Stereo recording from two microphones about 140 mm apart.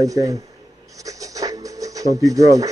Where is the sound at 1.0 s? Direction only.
25° right (ahead or behind).